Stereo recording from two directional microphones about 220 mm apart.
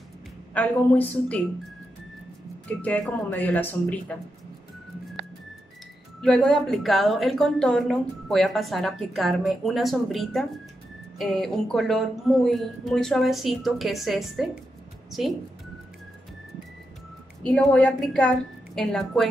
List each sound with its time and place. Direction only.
0.6 s speech: 5° left (ahead or behind)
2.8 s speech: 5° left (ahead or behind)
6.2 s a woman's voice: 5° left (ahead or behind)
17.5 s a woman's voice: 5° left (ahead or behind)